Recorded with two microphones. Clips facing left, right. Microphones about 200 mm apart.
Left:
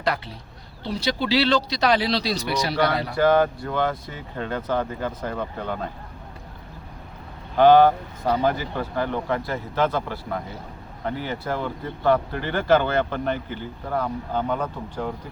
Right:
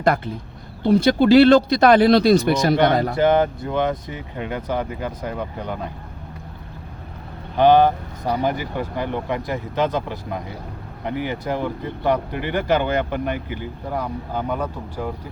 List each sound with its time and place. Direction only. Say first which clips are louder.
0.0 s speech: right 6 dB; 50° right (ahead or behind)
3.2 s speech: left 2 dB; 20° right (ahead or behind)
7.5 s speech: even; 15° right (ahead or behind)